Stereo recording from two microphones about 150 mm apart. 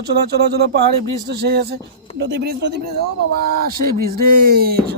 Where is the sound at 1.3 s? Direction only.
90° right.